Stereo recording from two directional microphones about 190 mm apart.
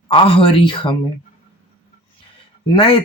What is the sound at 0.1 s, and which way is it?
Speech, 30° left (ahead or behind).